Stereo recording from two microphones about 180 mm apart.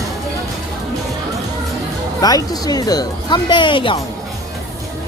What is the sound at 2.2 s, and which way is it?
Speech, 20° left (ahead or behind).